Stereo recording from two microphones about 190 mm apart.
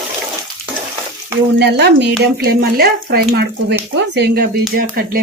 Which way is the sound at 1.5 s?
60° right (ahead or behind).